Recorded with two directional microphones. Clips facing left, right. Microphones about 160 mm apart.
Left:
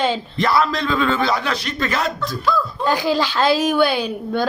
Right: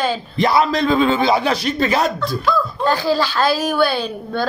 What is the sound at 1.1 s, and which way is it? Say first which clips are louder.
Speech: right 3 dB; 25° right (ahead or behind).